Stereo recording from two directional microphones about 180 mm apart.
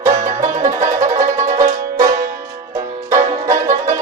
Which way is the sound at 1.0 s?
45° right (ahead or behind).